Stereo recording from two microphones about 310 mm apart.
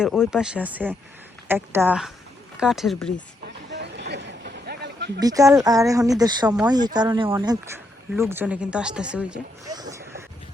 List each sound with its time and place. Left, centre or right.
0.0 s speech: centre
3.7 s a sound: right
5.2 s speech: centre